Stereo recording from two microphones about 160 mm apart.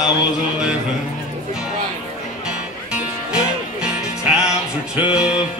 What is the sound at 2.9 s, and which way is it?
Music, 5° right (ahead or behind).